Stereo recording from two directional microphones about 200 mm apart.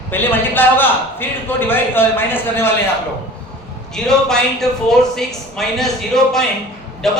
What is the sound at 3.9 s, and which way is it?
A man's voice, centre (ahead or behind).